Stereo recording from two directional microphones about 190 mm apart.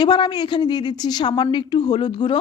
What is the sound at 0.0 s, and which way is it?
A woman's voice, 25° left (ahead or behind).